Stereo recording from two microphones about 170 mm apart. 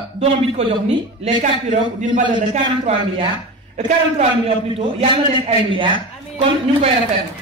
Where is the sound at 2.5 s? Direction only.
35° right (ahead or behind).